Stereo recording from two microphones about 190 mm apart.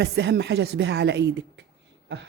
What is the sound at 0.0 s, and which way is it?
Speech, 65° right (ahead or behind).